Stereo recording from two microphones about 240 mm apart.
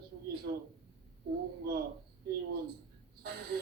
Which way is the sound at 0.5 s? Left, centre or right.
Right.